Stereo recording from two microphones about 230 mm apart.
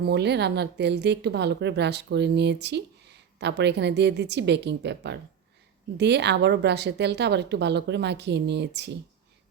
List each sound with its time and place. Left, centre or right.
0.0 s a woman's voice: right